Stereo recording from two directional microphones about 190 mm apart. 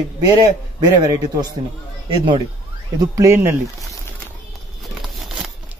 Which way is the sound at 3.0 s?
15° right (ahead or behind).